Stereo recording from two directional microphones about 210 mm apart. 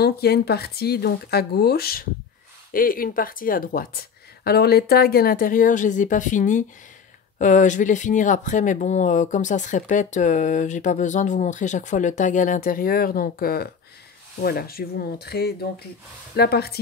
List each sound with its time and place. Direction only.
0.0 s speech: 50° left (ahead or behind)